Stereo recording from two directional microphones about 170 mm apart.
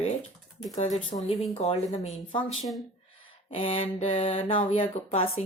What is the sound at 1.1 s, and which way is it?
Speech, 30° left (ahead or behind).